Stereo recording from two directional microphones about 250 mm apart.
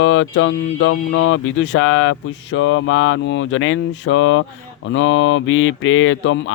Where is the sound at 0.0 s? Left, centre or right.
Left.